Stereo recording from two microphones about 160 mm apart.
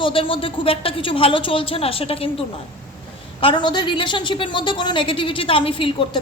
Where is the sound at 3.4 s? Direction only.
30° left (ahead or behind).